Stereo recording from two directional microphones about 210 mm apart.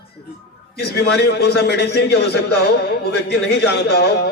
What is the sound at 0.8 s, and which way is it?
A man's voice, 50° left (ahead or behind).